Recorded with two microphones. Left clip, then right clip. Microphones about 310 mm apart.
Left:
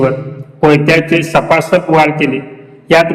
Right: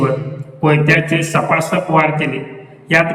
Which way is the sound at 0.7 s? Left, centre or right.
Centre.